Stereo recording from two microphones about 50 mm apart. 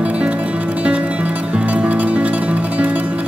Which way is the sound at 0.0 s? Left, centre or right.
Right.